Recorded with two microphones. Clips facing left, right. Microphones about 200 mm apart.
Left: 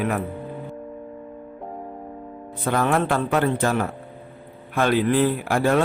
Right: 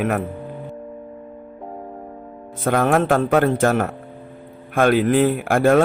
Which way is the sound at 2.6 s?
50° right (ahead or behind).